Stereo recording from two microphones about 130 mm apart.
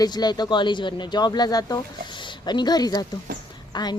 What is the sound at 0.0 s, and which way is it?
A woman's voice, 30° left (ahead or behind).